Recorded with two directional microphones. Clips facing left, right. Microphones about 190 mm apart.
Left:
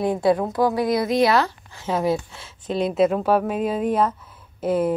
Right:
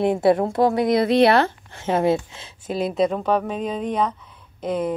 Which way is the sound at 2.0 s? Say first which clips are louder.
Right 2 dB; 20° right (ahead or behind).